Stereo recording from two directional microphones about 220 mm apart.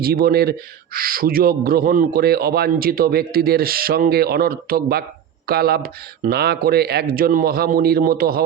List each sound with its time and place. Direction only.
0.0 s a man's voice: 45° right (ahead or behind)